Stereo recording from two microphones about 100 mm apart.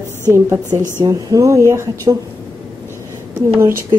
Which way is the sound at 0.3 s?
30° right (ahead or behind).